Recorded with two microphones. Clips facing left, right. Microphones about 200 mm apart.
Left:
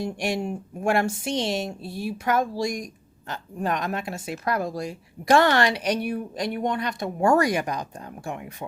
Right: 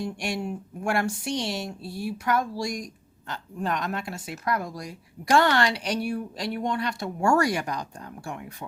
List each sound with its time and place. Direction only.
0.0 s a woman's voice: 20° left (ahead or behind)